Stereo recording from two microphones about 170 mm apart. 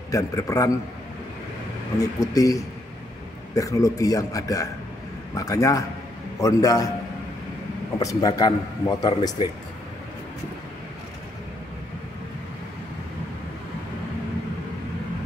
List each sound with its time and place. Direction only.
0.1 s a man's voice: 20° left (ahead or behind)
2.0 s a man's voice: 20° left (ahead or behind)
8.0 s a man's voice: 20° left (ahead or behind)